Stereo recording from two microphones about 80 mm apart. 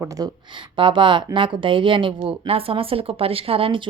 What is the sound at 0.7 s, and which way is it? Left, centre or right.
Speech, right.